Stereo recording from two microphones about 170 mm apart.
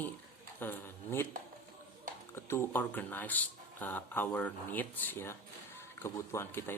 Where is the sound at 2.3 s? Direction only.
15° left (ahead or behind).